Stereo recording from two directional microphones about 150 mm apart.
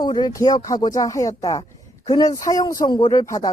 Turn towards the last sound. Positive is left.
turn(degrees=20)  # may be behind; listen again after turning